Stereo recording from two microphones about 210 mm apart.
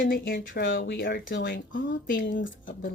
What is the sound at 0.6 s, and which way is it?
Speech, 60° left (ahead or behind).